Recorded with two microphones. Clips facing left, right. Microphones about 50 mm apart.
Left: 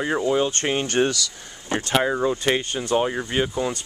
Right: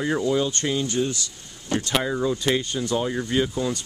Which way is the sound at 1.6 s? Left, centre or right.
Left.